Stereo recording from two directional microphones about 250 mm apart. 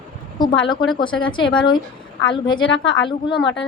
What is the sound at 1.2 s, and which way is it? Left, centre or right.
A woman's voice, centre.